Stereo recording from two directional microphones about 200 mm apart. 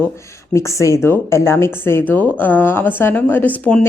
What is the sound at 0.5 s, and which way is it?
Speech, 15° left (ahead or behind).